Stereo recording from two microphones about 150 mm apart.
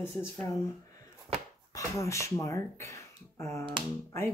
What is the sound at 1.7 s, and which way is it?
Speech, 20° left (ahead or behind).